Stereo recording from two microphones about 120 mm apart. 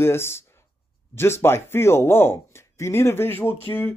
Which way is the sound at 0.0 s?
20° left (ahead or behind).